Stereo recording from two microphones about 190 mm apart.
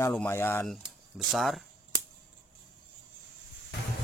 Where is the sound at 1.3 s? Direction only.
Centre (ahead or behind).